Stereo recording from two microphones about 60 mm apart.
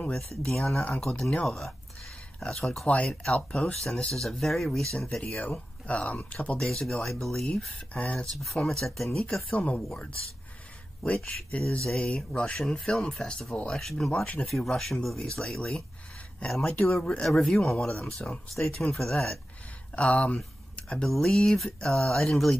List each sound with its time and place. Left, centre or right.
0.5 s speech: centre
0.8 s speech: left
1.4 s speech: centre
2.9 s speech: centre
5.4 s speech: left
6.6 s speech: centre
7.9 s speech: left
8.6 s speech: centre
11.0 s speech: centre
11.2 s speech: centre
18.9 s speech: centre
20.0 s speech: centre
20.7 s a sound: centre
21.1 s speech: centre